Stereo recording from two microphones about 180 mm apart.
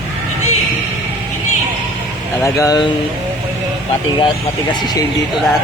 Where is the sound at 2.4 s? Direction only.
20° left (ahead or behind).